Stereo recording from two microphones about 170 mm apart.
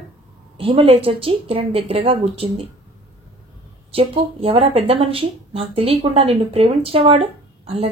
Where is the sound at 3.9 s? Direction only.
35° right (ahead or behind).